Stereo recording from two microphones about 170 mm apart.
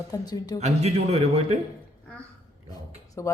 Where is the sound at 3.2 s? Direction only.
15° left (ahead or behind).